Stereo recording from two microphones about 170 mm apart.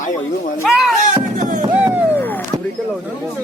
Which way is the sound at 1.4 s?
50° right (ahead or behind).